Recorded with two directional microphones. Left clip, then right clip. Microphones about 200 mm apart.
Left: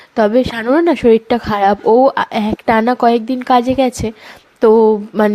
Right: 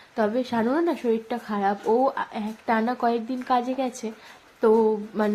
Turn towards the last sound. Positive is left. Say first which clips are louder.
# left 12 dB
turn(degrees=40)  # may be behind; listen again after turning